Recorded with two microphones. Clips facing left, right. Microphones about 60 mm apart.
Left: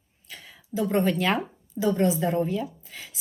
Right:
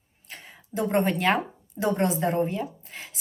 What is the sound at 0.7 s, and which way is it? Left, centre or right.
A woman's voice, right.